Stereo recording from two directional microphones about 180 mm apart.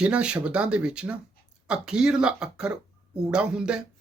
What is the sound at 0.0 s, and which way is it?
Speech, 5° right (ahead or behind).